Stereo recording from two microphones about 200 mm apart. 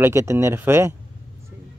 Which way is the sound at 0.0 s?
15° right (ahead or behind).